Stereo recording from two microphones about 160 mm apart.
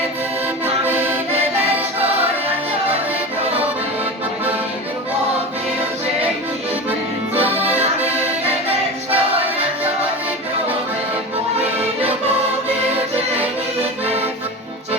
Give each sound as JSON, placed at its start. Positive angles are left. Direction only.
{"t": 0.6, "sound": "music", "side_deg": -15}
{"t": 7.3, "sound": "accordion", "side_deg": -35}
{"t": 7.7, "sound": "accordion", "side_deg": -10}
{"t": 9.1, "sound": "a capella", "side_deg": -35}
{"t": 12.9, "sound": "music", "side_deg": -40}